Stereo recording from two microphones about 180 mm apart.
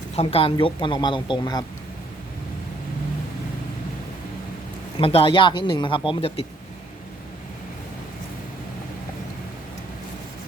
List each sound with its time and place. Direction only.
0.2 s a woman's voice: 35° left (ahead or behind)
4.9 s a woman's voice: 30° left (ahead or behind)